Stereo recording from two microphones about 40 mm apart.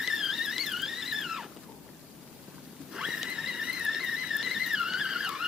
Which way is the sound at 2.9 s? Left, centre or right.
Centre.